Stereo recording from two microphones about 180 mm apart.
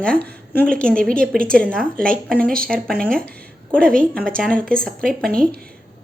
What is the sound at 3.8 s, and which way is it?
Speech, 50° right (ahead or behind).